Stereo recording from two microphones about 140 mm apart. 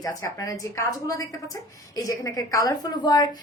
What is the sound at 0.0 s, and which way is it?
A woman's voice, 25° left (ahead or behind).